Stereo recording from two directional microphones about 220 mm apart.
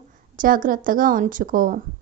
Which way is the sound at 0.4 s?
40° right (ahead or behind).